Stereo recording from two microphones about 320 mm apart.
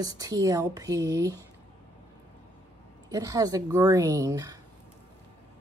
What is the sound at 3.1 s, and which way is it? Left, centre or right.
A woman's voice, centre.